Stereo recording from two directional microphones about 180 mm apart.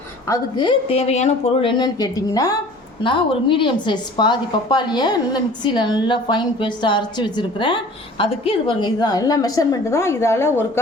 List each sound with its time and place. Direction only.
0.3 s a woman's voice: 25° left (ahead or behind)
1.8 s a woman's voice: 20° left (ahead or behind)